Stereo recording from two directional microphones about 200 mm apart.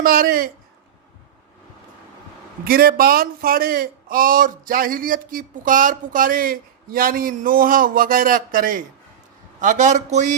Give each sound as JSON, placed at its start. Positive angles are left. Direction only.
{"t": 0.0, "sound": "a man's voice", "side_deg": -50}
{"t": 2.6, "sound": "a man's voice", "side_deg": -45}